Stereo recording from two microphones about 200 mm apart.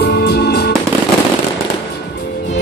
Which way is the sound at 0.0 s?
55° left (ahead or behind).